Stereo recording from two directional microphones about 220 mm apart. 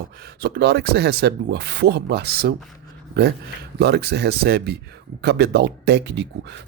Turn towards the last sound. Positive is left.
turn(degrees=-50)  # may be behind; listen again after turning